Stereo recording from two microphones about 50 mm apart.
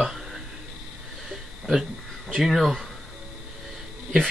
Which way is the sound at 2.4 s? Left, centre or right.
Centre.